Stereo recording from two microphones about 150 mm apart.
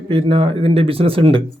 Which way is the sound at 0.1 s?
35° right (ahead or behind).